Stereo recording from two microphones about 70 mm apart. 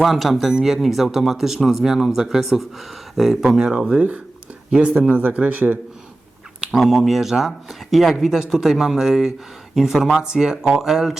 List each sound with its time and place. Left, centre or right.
0.0 s speech: centre; by 5.8 s right
6.7 s speech: centre